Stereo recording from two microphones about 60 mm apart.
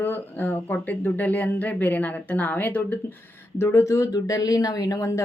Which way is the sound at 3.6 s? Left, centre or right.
Left.